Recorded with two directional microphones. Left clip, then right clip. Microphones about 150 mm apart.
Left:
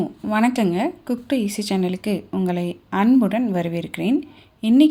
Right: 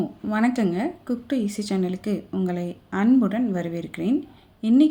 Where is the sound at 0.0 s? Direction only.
10° left (ahead or behind).